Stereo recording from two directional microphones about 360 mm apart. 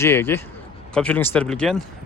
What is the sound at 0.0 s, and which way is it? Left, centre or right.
Speech, centre.